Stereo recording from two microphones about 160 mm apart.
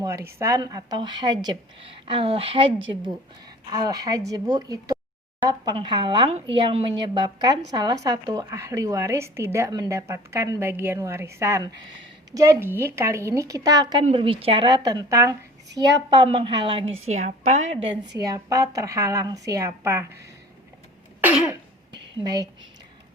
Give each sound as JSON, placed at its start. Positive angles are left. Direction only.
{"t": 0.0, "sound": "speech", "side_deg": -20}
{"t": 3.7, "sound": "speech", "side_deg": -25}
{"t": 14.0, "sound": "a woman's voice", "side_deg": -35}
{"t": 14.8, "sound": "a woman's voice", "side_deg": -20}
{"t": 18.3, "sound": "speech", "side_deg": -20}
{"t": 21.2, "sound": "cough", "side_deg": -10}
{"t": 22.2, "sound": "speech", "side_deg": -25}